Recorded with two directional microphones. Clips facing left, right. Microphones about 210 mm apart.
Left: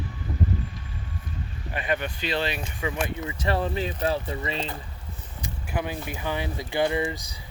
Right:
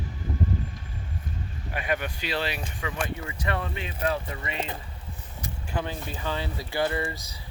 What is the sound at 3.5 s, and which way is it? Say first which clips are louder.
Speech: left 6 dB; 35° left (ahead or behind).